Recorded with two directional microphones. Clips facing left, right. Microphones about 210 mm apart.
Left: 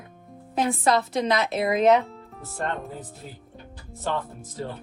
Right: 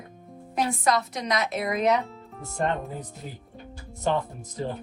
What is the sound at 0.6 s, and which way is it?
Speech, 30° left (ahead or behind).